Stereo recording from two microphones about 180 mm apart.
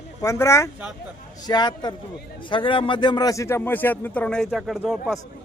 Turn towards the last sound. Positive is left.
turn(degrees=0)  # may be behind; listen again after turning